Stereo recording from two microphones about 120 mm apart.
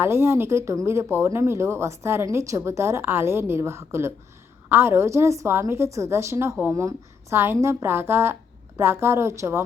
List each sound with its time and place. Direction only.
0.0 s a woman's voice: 20° right (ahead or behind)